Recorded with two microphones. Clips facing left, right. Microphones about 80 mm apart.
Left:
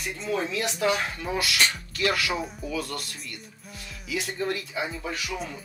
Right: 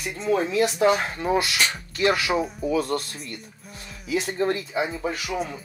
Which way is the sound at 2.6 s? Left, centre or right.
Right.